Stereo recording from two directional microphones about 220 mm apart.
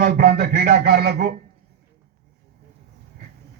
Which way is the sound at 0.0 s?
45° right (ahead or behind).